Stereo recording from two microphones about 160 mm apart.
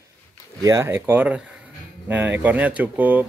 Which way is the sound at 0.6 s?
15° right (ahead or behind).